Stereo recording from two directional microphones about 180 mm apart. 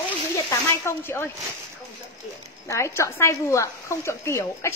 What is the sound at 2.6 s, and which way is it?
Speech, 15° left (ahead or behind).